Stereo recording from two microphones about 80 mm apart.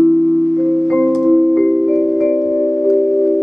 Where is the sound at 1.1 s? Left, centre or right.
Centre.